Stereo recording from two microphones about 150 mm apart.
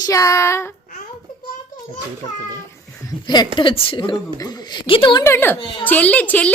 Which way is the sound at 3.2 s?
30° left (ahead or behind).